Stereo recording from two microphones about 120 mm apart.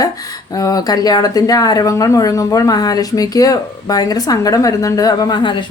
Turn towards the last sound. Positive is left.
turn(degrees=35)  # may be behind; listen again after turning